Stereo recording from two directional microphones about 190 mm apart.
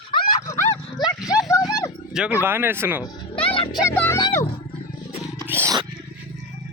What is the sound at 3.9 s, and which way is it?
Speech, 15° left (ahead or behind).